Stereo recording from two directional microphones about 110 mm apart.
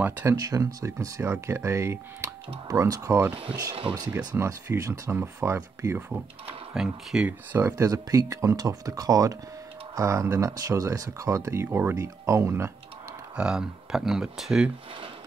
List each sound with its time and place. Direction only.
0.0 s speech: 15° right (ahead or behind)
0.4 s speech: 35° right (ahead or behind)
3.9 s speech: 45° right (ahead or behind)
4.4 s speech: 30° right (ahead or behind)
5.9 s speech: 15° right (ahead or behind)
7.7 s speech: 30° right (ahead or behind)
13.4 s speech: 5° right (ahead or behind)